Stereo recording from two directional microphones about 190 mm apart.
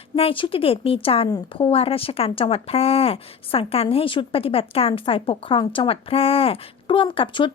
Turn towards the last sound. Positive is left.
turn(degrees=25)  # may be behind; listen again after turning